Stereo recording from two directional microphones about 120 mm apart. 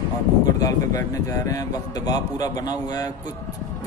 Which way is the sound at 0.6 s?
30° left (ahead or behind).